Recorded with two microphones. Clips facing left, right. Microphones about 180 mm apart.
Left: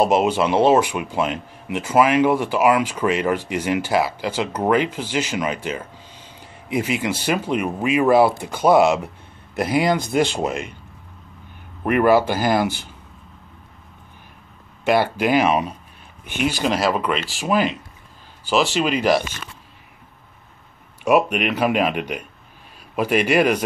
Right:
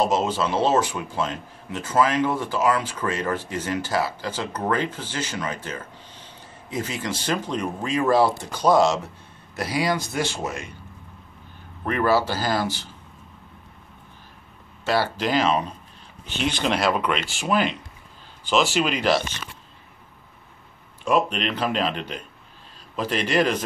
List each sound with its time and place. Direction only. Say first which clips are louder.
0.1 s speech: left 5 dB; 15° left (ahead or behind)
8.7 s speech: left 4 dB; 60° left (ahead or behind)
10.1 s speech: left 7 dB; 15° left (ahead or behind)
11.8 s speech: left 5 dB; 15° left (ahead or behind)
14.9 s speech: left 5 dB; 15° left (ahead or behind)
21.0 s speech: left 5 dB; 10° left (ahead or behind)